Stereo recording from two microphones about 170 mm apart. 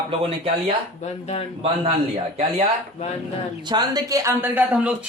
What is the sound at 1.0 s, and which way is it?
Speech, 40° left (ahead or behind).